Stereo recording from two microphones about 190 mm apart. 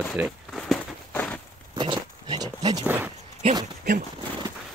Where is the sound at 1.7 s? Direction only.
25° right (ahead or behind).